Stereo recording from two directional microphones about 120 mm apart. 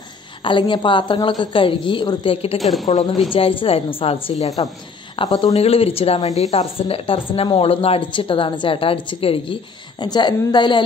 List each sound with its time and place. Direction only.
0.4 s a woman's voice: 45° left (ahead or behind)
2.6 s a woman's voice: centre (ahead or behind)
3.3 s a woman's voice: 50° left (ahead or behind)
5.6 s a woman's voice: 55° left (ahead or behind); by 10.8 s 40° left (ahead or behind)